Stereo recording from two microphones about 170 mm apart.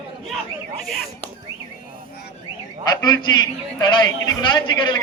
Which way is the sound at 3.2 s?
25° left (ahead or behind).